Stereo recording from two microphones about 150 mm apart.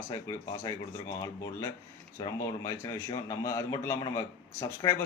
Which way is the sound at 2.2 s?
25° left (ahead or behind).